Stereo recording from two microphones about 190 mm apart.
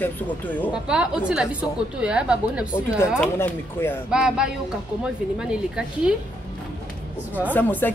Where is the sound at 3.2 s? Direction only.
10° left (ahead or behind).